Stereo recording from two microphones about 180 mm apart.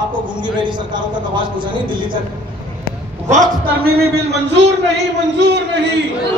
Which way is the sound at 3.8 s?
65° right (ahead or behind).